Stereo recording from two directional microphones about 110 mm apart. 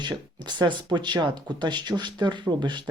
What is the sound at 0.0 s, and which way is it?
Speech, 45° right (ahead or behind).